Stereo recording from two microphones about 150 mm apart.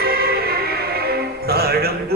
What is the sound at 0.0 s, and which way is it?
Music, 90° right.